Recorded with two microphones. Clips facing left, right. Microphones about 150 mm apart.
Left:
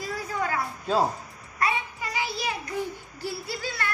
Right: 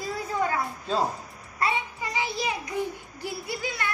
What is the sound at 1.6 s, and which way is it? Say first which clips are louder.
Child singing: even; 25° right (ahead or behind).